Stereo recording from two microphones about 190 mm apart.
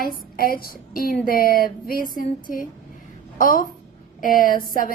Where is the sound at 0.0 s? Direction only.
50° left (ahead or behind).